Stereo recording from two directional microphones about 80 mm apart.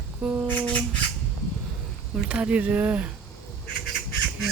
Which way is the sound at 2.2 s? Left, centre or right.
Centre.